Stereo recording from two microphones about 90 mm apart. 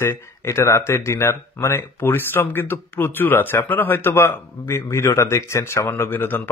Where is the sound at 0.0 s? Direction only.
30° left (ahead or behind).